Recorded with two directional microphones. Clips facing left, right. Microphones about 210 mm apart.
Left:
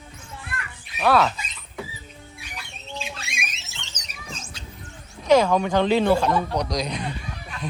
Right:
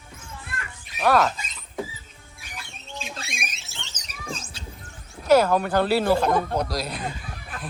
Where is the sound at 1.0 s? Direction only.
10° right (ahead or behind).